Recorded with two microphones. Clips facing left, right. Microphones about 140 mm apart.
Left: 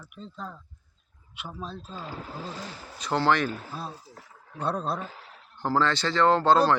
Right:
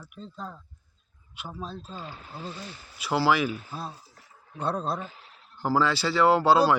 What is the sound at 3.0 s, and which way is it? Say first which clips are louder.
Speech: even; 5° right (ahead or behind).